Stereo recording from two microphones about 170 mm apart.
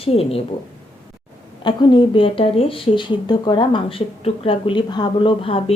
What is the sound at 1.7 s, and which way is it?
Speech, 30° left (ahead or behind).